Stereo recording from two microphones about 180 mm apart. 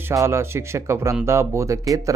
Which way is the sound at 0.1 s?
15° right (ahead or behind).